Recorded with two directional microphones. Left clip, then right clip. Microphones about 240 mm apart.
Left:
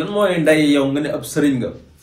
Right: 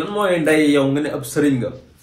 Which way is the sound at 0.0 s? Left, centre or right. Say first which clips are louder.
Left 2 dB; centre.